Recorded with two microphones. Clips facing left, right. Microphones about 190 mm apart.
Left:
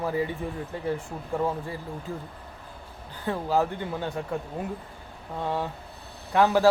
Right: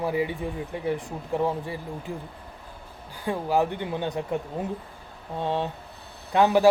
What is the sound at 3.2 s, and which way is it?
Speech, 15° right (ahead or behind).